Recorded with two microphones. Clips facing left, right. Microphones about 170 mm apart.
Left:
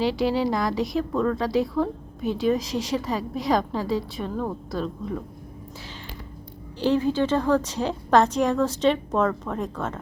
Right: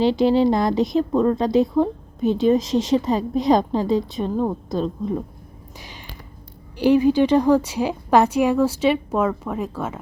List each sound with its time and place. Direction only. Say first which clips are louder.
0.0 s a woman's voice: right 6 dB; 25° right (ahead or behind)
6.7 s a woman's voice: right 6 dB; 15° right (ahead or behind)